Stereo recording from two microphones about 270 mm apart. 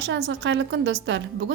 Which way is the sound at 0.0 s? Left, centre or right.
Right.